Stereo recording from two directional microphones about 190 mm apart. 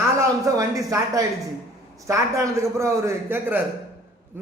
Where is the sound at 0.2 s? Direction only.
15° right (ahead or behind).